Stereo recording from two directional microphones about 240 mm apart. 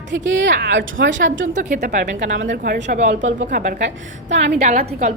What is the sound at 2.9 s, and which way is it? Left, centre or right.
Speech, right.